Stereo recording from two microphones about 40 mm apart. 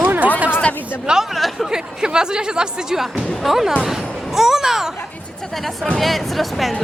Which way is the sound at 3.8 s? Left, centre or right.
Centre.